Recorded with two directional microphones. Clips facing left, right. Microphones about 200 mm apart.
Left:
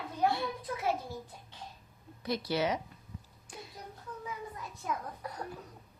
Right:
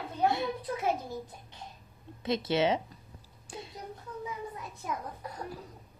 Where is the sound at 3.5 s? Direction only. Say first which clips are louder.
Right 4 dB; 25° right (ahead or behind).